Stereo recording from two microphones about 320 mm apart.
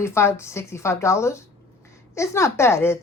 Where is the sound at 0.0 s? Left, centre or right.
Centre.